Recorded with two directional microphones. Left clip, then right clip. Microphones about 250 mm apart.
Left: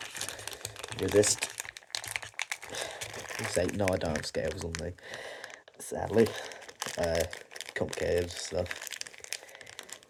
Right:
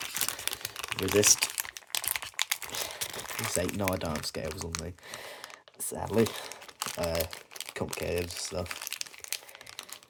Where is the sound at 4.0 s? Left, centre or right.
Right.